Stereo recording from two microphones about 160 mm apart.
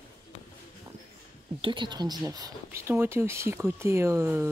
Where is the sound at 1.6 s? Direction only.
30° right (ahead or behind); by 4.5 s 15° right (ahead or behind).